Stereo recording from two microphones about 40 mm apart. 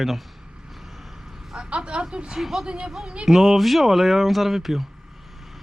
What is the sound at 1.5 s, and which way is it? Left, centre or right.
Speech, right.